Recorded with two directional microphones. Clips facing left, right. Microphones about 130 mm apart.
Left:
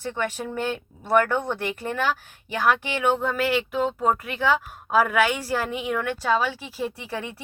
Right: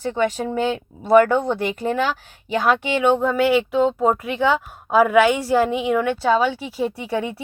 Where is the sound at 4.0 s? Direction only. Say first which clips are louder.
Right 5 dB; 15° right (ahead or behind).